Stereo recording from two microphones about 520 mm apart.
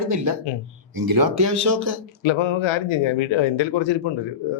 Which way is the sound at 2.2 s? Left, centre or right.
Left.